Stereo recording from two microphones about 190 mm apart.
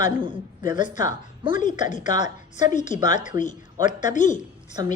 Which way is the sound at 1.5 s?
40° left (ahead or behind).